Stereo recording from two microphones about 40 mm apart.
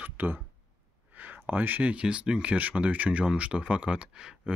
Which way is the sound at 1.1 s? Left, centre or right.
Right.